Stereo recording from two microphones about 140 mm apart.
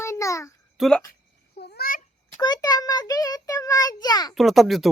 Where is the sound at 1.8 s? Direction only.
80° left.